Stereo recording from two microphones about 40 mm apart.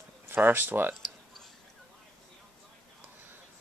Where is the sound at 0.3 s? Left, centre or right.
Right.